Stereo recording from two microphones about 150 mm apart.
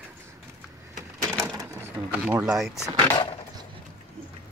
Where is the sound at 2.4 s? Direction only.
5° right (ahead or behind).